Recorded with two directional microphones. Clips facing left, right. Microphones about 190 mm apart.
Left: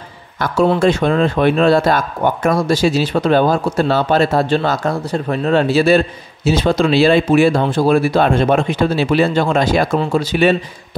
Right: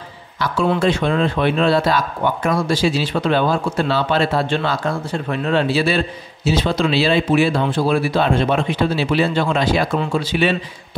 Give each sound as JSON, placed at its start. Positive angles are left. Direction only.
{"t": 0.4, "sound": "a man's voice", "side_deg": 45}